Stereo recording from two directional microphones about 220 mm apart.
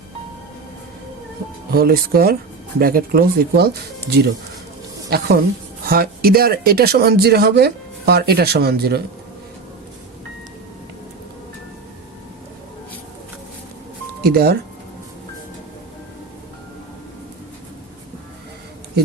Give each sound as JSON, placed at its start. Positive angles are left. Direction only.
{"t": 1.7, "sound": "speech", "side_deg": -45}
{"t": 14.3, "sound": "speech", "side_deg": -45}